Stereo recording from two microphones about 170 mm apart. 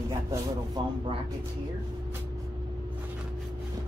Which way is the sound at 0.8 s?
25° right (ahead or behind).